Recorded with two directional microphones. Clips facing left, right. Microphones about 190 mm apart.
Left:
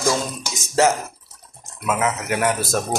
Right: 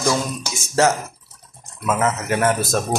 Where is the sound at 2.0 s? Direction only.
Centre (ahead or behind).